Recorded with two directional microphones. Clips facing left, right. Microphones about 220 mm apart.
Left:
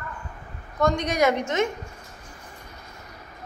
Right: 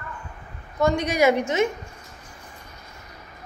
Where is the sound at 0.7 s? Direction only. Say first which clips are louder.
Right 1 dB; 5° right (ahead or behind).